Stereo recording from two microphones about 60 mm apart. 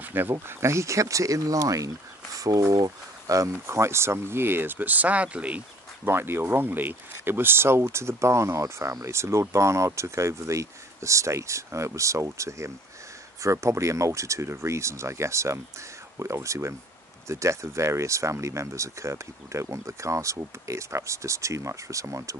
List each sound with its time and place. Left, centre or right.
0.0 s speech: right
3.6 s speech: right
6.0 s speech: right